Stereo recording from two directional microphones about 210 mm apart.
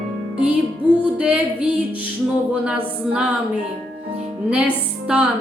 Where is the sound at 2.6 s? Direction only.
5° right (ahead or behind).